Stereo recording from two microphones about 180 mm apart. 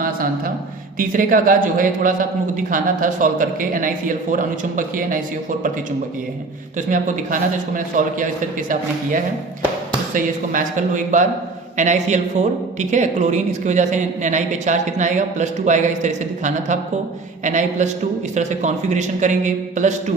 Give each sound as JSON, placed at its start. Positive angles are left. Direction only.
{"t": 0.0, "sound": "a sound", "side_deg": -50}
{"t": 0.9, "sound": "a woman's voice", "side_deg": -50}
{"t": 6.7, "sound": "a woman's voice", "side_deg": -45}